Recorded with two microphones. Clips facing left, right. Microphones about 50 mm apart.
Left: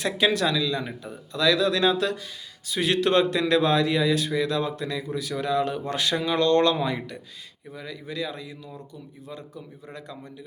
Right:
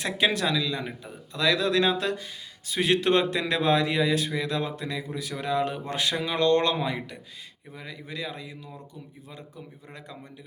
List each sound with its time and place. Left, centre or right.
0.0 s speech: right
1.3 s a man's voice: right